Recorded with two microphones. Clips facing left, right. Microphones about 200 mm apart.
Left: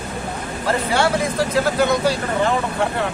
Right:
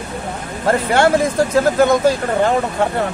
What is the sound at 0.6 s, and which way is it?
Speech, 50° right (ahead or behind).